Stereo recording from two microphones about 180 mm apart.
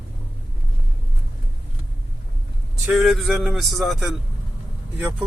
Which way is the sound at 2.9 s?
Centre (ahead or behind).